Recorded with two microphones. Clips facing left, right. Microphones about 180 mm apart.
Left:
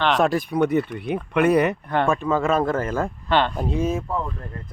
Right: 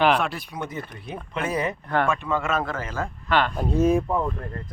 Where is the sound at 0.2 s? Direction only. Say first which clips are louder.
Left 8 dB; 45° left (ahead or behind).